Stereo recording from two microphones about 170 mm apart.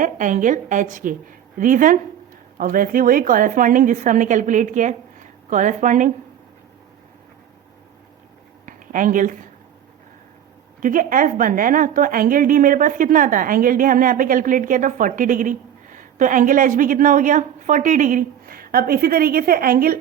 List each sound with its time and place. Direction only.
0.0 s a woman's voice: 50° right (ahead or behind)
8.6 s a sound: 50° right (ahead or behind)
10.8 s a woman's voice: 50° right (ahead or behind)